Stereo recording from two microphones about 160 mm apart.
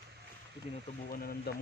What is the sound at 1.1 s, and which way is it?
Speech, 70° left (ahead or behind).